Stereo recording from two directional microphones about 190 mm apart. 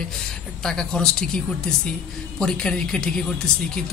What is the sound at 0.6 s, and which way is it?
Speech, 5° left (ahead or behind).